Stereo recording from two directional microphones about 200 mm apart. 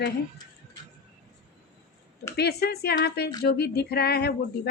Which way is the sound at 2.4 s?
55° left (ahead or behind).